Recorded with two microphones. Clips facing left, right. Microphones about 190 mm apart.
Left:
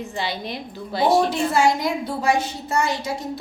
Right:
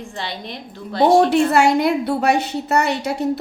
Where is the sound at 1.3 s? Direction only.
65° right (ahead or behind).